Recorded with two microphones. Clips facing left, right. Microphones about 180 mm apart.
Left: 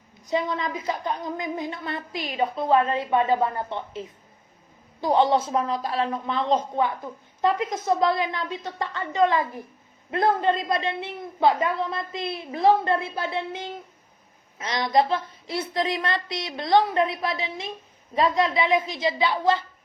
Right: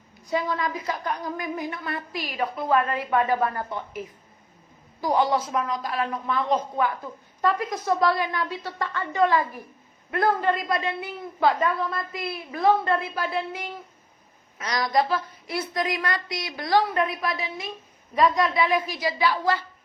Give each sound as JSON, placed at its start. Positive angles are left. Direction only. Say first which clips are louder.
{"t": 0.3, "sound": "a woman's voice", "louder": "even", "side_deg": 20}